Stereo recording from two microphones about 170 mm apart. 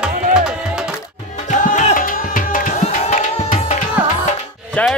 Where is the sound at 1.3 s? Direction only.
45° left (ahead or behind).